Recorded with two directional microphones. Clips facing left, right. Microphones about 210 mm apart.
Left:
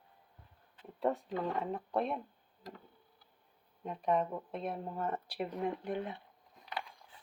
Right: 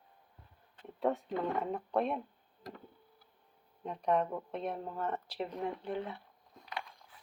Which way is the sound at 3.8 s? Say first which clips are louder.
Right 1 dB; 5° left (ahead or behind).